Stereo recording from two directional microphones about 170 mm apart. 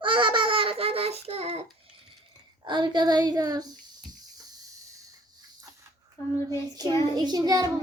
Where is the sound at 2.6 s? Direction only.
25° right (ahead or behind).